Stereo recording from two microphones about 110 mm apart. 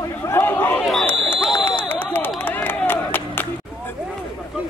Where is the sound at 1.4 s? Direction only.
Centre (ahead or behind).